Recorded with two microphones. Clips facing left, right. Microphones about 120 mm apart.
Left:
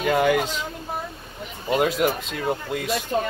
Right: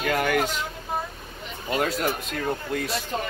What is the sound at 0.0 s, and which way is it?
Speech, 20° left (ahead or behind).